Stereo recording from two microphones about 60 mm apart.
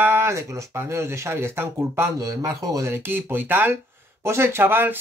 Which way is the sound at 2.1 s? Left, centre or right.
Right.